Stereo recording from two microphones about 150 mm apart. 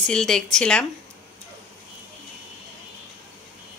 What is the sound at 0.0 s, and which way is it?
Speech, 5° left (ahead or behind).